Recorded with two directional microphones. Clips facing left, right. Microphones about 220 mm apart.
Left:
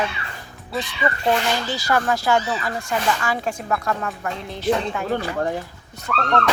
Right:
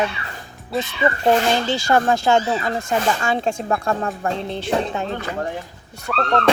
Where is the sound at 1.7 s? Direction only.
25° right (ahead or behind).